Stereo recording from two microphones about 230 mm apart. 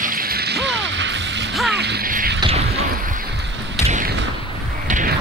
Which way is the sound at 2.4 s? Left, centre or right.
Right.